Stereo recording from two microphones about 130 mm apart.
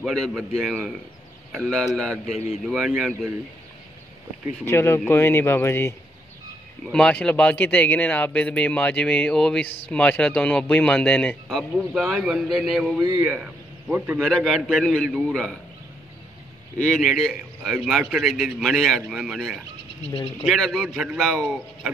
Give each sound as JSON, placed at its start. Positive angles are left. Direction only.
{"t": 0.0, "sound": "a man's voice", "side_deg": 0}
{"t": 1.5, "sound": "a man's voice", "side_deg": 0}
{"t": 4.6, "sound": "speech", "side_deg": 20}
{"t": 6.9, "sound": "a man's voice", "side_deg": 5}
{"t": 14.2, "sound": "a man's voice", "side_deg": 0}
{"t": 16.9, "sound": "a man's voice", "side_deg": 0}